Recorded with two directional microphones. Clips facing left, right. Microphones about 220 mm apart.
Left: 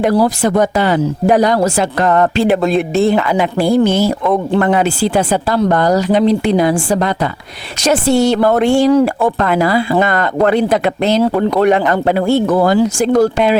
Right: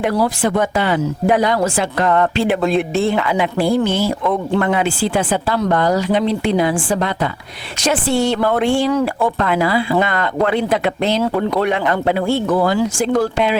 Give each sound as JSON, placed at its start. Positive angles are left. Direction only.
{"t": 0.0, "sound": "speech", "side_deg": 35}